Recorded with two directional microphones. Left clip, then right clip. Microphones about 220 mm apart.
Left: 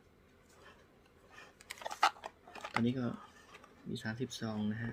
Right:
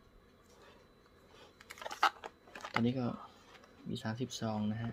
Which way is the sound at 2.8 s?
30° right (ahead or behind).